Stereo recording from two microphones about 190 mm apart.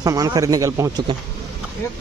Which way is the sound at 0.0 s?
20° right (ahead or behind).